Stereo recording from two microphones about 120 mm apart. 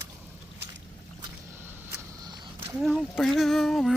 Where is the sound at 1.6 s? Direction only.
20° right (ahead or behind).